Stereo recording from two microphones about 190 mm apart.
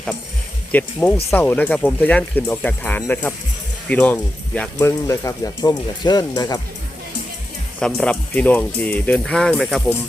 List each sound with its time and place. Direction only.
0.7 s speech: 10° left (ahead or behind)
7.8 s speech: 5° left (ahead or behind)